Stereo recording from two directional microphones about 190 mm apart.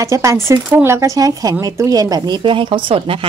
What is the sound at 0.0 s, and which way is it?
Speech, 15° right (ahead or behind).